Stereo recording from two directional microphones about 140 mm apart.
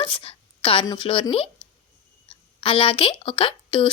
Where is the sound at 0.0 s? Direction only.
40° left (ahead or behind).